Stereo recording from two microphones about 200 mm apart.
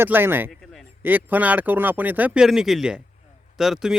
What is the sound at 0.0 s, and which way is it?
A man's voice, 10° right (ahead or behind).